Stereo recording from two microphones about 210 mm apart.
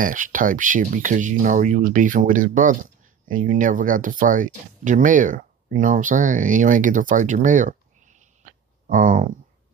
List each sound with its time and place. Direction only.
0.0 s speech: 40° right (ahead or behind)